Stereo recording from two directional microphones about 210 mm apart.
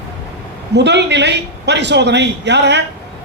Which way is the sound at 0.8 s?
55° right (ahead or behind).